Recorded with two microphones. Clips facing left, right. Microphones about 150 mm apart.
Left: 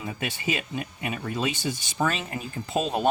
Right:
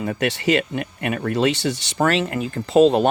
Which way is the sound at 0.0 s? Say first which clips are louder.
Right 9 dB; 70° right (ahead or behind).